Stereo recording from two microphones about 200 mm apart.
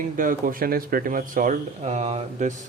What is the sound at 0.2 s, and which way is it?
Speech, 45° right (ahead or behind).